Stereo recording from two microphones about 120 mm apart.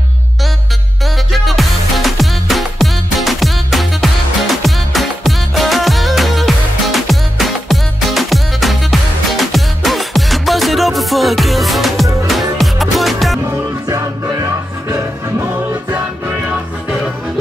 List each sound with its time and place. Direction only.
1.0 s music: centre (ahead or behind)
13.8 s music: 25° right (ahead or behind)